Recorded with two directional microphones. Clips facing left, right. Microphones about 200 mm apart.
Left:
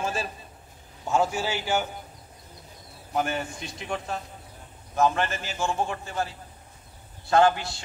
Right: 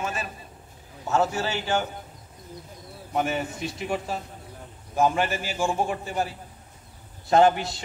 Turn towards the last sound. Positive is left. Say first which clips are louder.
# right 2 dB
turn(degrees=-20)  # may be behind; listen again after turning